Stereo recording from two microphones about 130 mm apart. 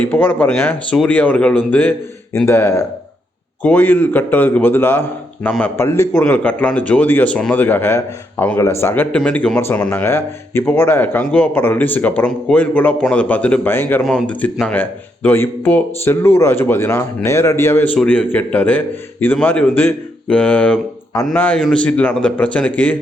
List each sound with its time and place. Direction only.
0.0 s speech: 15° left (ahead or behind)
5.5 s a man's voice: 5° left (ahead or behind)
5.7 s speech: 20° left (ahead or behind)
14.0 s speech: centre (ahead or behind)